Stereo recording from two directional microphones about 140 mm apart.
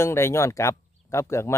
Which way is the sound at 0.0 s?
20° left (ahead or behind).